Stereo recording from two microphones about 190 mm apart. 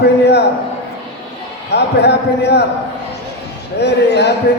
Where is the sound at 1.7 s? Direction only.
60° left (ahead or behind).